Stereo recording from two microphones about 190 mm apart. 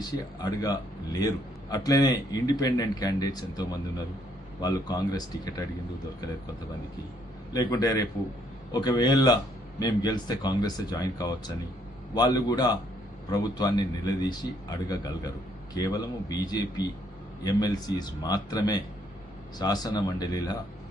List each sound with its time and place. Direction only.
0.0 s a man's voice: 20° left (ahead or behind)
7.5 s a man's voice: 20° left (ahead or behind)